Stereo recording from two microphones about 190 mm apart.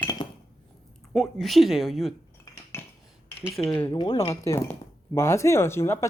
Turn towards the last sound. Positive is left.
turn(degrees=15)  # may be behind; listen again after turning